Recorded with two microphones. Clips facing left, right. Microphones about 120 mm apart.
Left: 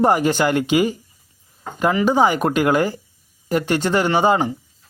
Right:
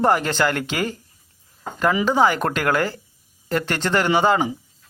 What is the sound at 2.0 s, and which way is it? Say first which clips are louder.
Speech: left 3 dB; 15° left (ahead or behind).